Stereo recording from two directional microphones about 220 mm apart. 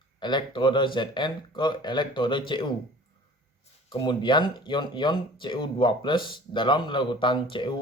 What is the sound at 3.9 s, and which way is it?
Speech, 20° left (ahead or behind).